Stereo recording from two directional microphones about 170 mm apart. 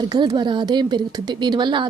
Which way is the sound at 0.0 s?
25° right (ahead or behind).